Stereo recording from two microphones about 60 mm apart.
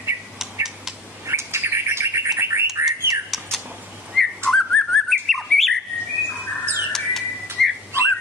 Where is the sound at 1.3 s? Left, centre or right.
Right.